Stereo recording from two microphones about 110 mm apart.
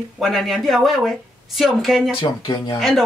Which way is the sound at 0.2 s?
Centre (ahead or behind).